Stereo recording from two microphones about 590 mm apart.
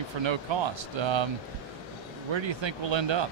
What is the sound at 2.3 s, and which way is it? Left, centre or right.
Speech, right.